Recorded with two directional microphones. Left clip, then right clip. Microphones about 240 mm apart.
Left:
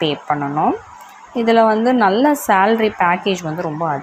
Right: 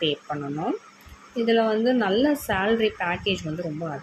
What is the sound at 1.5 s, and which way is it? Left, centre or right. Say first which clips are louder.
A woman's voice: left 8 dB; centre.